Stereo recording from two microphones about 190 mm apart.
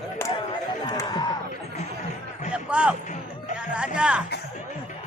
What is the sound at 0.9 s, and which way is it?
Music, 25° left (ahead or behind).